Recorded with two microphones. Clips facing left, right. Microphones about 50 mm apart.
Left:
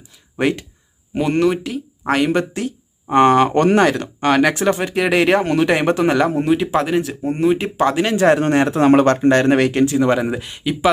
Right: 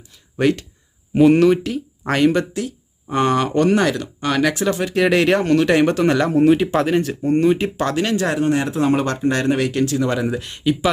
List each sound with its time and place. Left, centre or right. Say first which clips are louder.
0.3 s speech: right 1 dB; centre
1.1 s speech: right 4 dB; centre
2.3 s speech: left 1 dB; left
4.9 s speech: right 1 dB; centre
6.3 s speech: right 2 dB; centre
8.1 s speech: left 6 dB; left
8.4 s speech: left 3 dB; left
9.7 s speech: left 4 dB; left
10.4 s speech: right 3 dB; centre